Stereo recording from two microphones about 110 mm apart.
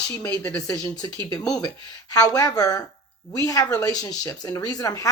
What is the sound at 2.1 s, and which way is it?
A woman's voice, 35° left (ahead or behind).